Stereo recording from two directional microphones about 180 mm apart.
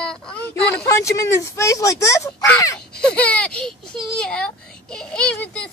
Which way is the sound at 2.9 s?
5° left (ahead or behind).